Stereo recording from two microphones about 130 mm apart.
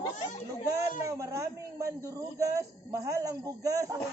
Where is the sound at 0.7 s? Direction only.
25° right (ahead or behind).